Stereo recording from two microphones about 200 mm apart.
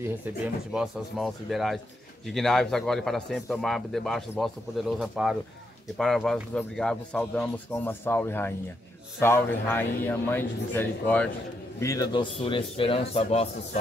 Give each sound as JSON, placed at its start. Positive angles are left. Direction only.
{"t": 0.7, "sound": "a man's voice", "side_deg": 0}